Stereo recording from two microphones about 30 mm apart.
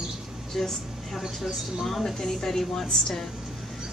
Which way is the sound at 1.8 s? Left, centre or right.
Centre.